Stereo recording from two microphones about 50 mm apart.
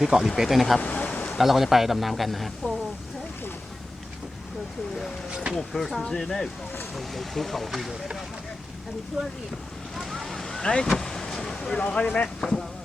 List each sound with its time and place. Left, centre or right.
0.0 s speech: centre
0.8 s a sound: left
1.4 s speech: centre
5.3 s vehicle: centre
5.5 s speech: centre
9.9 s a sound: centre
10.7 s speech: centre
10.9 s vehicle: centre
11.8 s speech: left